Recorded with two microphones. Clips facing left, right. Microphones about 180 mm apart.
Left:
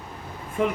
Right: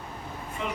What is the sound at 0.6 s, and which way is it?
Speech, 50° left (ahead or behind).